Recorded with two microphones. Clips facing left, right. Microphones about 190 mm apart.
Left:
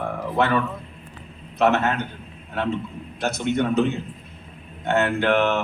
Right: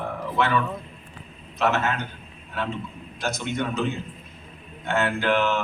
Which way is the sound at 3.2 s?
60° left (ahead or behind).